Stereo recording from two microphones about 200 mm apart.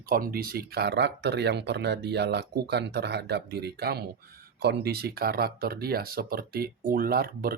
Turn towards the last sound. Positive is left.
turn(degrees=-45)  # may be behind; listen again after turning